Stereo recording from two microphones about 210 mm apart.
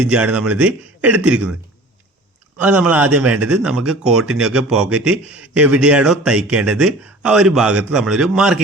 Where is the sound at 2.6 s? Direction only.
5° right (ahead or behind).